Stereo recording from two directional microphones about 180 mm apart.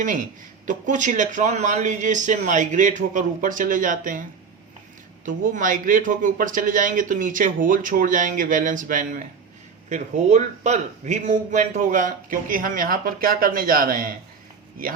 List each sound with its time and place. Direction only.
0.7 s speech: 45° right (ahead or behind)
5.2 s speech: 45° right (ahead or behind)